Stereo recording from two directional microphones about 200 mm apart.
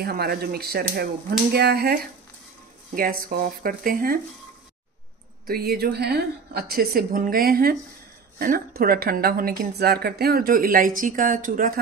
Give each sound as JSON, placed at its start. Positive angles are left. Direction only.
{"t": 0.0, "sound": "speech", "side_deg": -50}
{"t": 5.5, "sound": "speech", "side_deg": -50}